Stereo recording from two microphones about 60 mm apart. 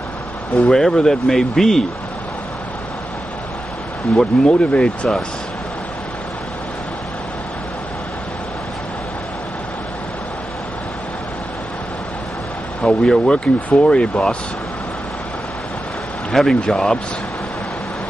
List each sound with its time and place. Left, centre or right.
0.6 s speech: centre
4.2 s speech: centre
12.8 s speech: centre
13.2 s speech: left
16.3 s speech: centre